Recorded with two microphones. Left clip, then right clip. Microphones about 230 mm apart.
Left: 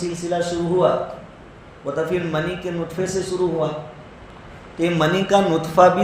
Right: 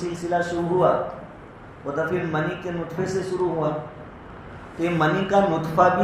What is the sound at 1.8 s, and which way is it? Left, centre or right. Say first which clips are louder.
Speech: left 2 dB; left.